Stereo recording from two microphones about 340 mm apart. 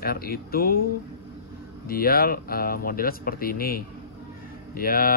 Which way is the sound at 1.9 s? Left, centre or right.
Left.